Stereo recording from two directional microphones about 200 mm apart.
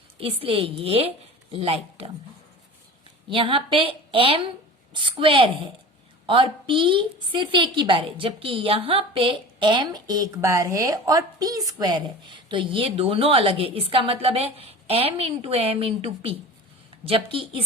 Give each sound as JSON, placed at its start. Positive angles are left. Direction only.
{"t": 0.2, "sound": "a woman's voice", "side_deg": -30}
{"t": 3.2, "sound": "a woman's voice", "side_deg": -25}